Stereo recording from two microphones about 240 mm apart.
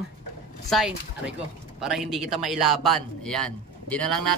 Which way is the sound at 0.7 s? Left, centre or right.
Centre.